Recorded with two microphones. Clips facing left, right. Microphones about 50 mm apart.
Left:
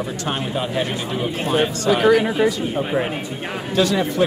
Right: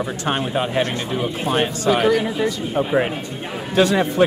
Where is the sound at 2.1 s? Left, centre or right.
Centre.